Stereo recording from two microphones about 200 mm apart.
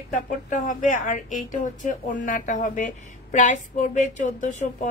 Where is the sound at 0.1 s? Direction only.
40° left (ahead or behind).